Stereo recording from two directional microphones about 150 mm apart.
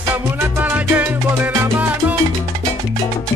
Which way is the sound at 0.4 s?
10° right (ahead or behind).